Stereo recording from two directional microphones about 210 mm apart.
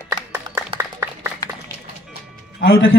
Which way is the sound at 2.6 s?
50° left (ahead or behind).